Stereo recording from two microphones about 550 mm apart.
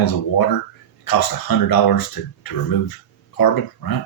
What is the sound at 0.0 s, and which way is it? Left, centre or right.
Speech, left.